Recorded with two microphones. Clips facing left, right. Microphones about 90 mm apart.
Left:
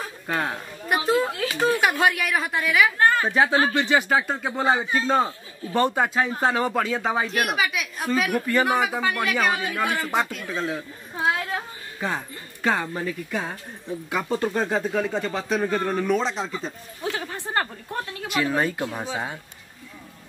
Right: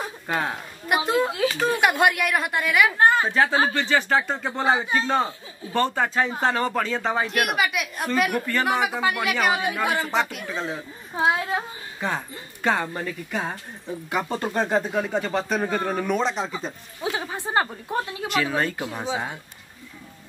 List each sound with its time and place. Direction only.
0.0 s a woman's voice: 10° right (ahead or behind)
3.0 s a sound: 20° right (ahead or behind)
3.3 s speech: 10° left (ahead or behind); by 11.6 s 20° right (ahead or behind)
12.6 s speech: centre (ahead or behind)
17.0 s speech: 15° right (ahead or behind)
18.3 s speech: 5° left (ahead or behind)